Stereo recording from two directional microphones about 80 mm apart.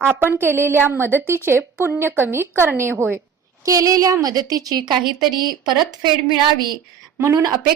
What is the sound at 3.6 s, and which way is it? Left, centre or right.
A woman's voice, right.